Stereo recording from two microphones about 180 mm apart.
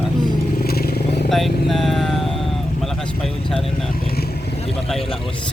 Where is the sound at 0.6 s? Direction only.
60° left (ahead or behind).